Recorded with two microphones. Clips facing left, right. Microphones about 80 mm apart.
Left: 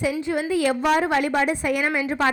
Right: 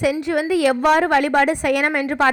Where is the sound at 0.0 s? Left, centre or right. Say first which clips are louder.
Right 4 dB; right.